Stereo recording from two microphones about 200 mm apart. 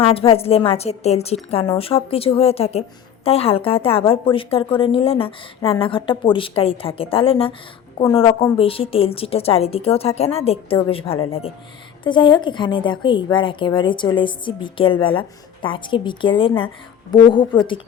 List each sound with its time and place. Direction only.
0.1 s a woman's voice: 30° left (ahead or behind)